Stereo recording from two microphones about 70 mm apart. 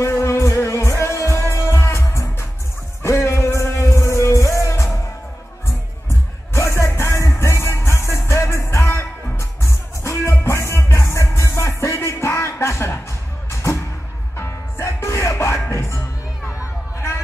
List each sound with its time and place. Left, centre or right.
0.0 s music: left
6.5 s music: left
16.5 s a sound: left